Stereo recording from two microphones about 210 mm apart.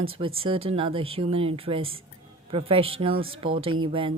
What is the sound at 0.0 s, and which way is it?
Speech, 25° right (ahead or behind).